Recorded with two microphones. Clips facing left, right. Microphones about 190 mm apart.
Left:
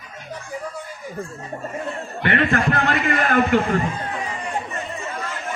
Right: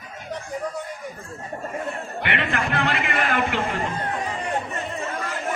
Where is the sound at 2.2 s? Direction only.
45° left (ahead or behind).